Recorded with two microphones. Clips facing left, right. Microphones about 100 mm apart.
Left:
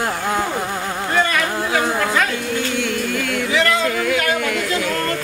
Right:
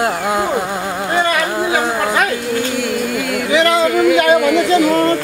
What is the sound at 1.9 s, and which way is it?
Music, 5° right (ahead or behind).